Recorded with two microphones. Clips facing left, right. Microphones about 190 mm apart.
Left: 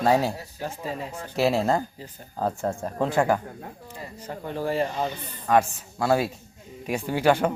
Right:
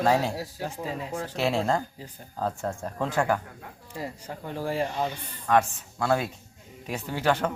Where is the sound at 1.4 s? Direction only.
5° left (ahead or behind).